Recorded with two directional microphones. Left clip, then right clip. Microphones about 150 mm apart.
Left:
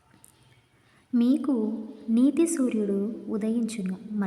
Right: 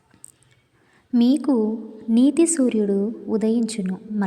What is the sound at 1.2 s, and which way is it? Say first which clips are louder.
A woman's voice: right 6 dB; 25° right (ahead or behind).